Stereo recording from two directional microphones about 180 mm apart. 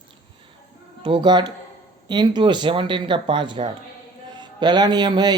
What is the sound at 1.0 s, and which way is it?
Speech, 25° right (ahead or behind).